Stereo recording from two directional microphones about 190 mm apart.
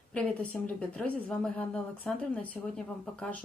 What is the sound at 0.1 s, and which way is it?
A woman's voice, 5° left (ahead or behind).